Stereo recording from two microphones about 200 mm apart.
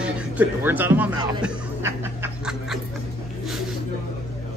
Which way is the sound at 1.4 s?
10° right (ahead or behind).